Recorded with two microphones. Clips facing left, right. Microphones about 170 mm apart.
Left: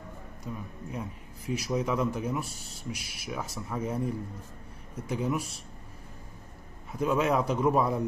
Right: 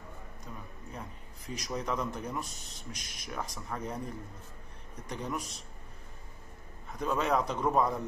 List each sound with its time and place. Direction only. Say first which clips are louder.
0.5 s speech: left 8 dB; 5° left (ahead or behind)
6.9 s speech: left 4 dB; 5° left (ahead or behind)